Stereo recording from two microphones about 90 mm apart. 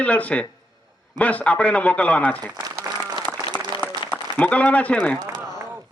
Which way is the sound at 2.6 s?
50° right (ahead or behind).